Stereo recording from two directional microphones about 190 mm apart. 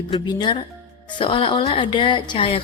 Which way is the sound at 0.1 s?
25° left (ahead or behind).